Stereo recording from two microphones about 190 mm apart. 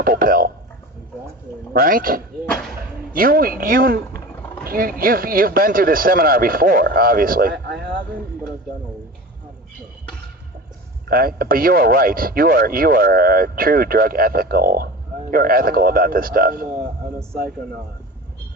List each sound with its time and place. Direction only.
0.0 s speech: 50° right (ahead or behind)
1.7 s speech: 50° right (ahead or behind)
11.1 s speech: 50° right (ahead or behind)